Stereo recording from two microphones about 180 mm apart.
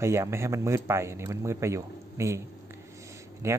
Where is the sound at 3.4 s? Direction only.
15° right (ahead or behind).